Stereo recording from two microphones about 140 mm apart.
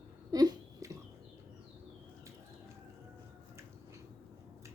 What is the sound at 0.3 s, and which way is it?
Hiccup, 25° right (ahead or behind).